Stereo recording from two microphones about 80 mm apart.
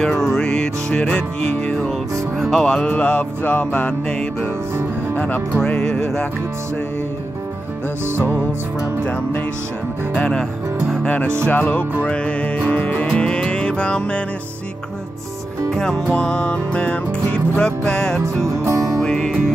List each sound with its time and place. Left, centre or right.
0.0 s music: centre
5.1 s speech: centre
5.7 s music: centre
10.1 s music: centre
15.7 s music: centre
18.6 s music: right
18.9 s music: centre